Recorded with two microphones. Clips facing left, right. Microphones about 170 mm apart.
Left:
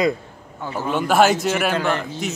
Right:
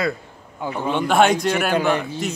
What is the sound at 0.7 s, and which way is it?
Speech, 5° left (ahead or behind).